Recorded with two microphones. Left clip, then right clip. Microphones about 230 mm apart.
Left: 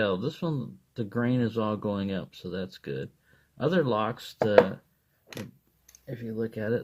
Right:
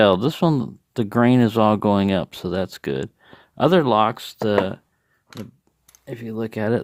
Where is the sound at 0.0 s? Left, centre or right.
Right.